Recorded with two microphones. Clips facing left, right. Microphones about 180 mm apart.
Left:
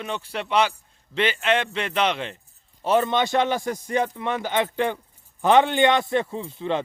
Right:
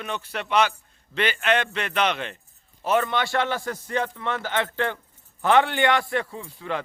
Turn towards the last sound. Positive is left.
turn(degrees=25)  # may be behind; listen again after turning